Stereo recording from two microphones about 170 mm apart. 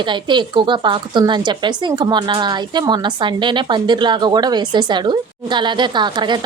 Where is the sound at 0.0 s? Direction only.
25° right (ahead or behind).